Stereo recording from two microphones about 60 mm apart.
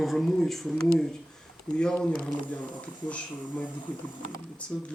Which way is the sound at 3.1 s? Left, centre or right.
Left.